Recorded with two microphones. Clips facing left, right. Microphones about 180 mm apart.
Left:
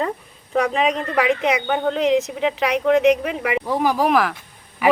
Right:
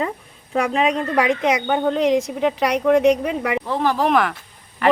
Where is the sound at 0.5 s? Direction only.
5° right (ahead or behind).